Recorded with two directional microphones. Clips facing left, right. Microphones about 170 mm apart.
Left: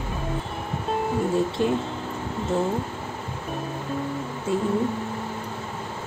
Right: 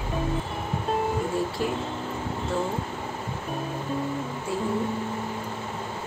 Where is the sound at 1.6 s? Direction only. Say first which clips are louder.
Left 6 dB; 20° left (ahead or behind).